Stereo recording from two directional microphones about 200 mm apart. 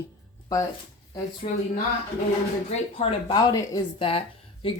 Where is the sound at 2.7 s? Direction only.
30° left (ahead or behind).